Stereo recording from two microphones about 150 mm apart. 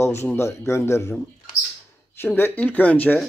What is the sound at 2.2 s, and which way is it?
Speech, 15° left (ahead or behind).